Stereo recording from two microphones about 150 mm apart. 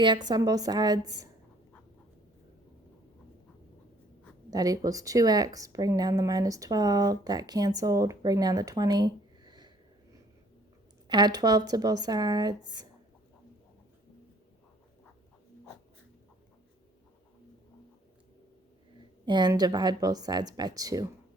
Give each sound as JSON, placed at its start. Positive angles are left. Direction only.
{"t": 0.3, "sound": "speech", "side_deg": -25}
{"t": 4.5, "sound": "speech", "side_deg": -25}
{"t": 11.1, "sound": "speech", "side_deg": -25}
{"t": 19.2, "sound": "speech", "side_deg": -30}